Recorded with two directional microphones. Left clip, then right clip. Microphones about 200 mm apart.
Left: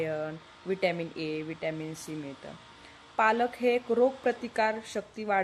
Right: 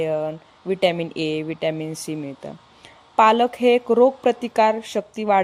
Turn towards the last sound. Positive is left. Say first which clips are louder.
# right 10 dB
turn(degrees=-35)  # may be behind; listen again after turning